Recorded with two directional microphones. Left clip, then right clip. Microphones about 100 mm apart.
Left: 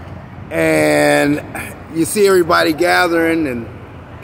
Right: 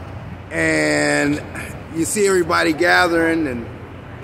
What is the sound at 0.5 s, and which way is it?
Speech, 55° left (ahead or behind).